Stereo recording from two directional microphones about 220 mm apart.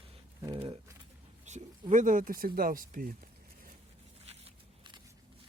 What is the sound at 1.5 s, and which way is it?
Speech, 35° right (ahead or behind).